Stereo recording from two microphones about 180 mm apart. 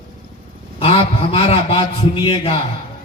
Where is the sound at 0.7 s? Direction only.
30° left (ahead or behind).